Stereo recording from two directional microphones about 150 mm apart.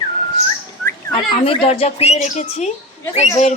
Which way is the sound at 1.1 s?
35° left (ahead or behind).